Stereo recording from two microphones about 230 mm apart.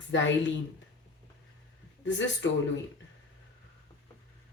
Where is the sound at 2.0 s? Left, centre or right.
Left.